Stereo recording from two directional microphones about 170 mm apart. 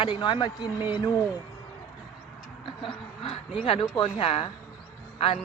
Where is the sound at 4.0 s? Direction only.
35° left (ahead or behind).